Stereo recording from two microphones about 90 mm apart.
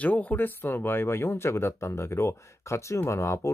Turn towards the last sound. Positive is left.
turn(degrees=30)  # may be behind; listen again after turning